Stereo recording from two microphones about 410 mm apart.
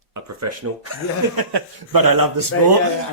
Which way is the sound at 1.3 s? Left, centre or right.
Right.